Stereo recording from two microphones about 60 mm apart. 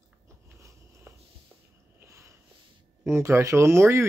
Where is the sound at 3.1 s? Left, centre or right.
Right.